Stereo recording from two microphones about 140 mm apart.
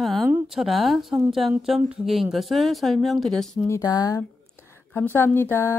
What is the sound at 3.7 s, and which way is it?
Speech, 25° left (ahead or behind).